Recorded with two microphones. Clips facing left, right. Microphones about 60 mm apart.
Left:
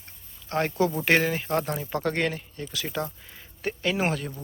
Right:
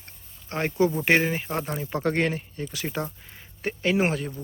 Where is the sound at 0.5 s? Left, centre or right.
Right.